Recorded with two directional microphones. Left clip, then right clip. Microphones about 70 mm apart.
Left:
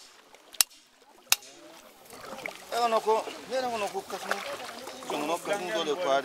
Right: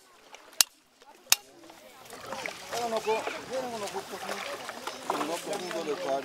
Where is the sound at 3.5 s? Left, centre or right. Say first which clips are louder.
Left 7 dB; right.